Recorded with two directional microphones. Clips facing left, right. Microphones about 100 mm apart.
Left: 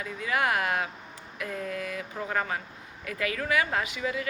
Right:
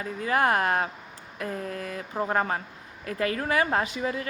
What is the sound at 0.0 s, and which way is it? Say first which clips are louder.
Speech: right 4 dB; 40° right (ahead or behind).